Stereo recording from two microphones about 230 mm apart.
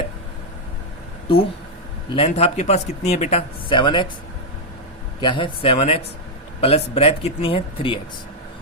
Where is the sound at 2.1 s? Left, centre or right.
Left.